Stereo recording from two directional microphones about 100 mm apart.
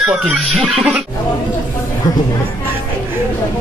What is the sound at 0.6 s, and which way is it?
Music, centre (ahead or behind).